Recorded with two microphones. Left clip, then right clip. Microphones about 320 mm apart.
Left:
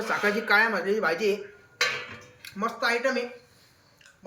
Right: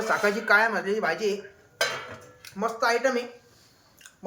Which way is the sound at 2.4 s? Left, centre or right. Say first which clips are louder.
Right 2 dB; centre.